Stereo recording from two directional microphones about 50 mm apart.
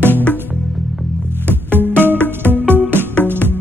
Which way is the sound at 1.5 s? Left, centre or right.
Right.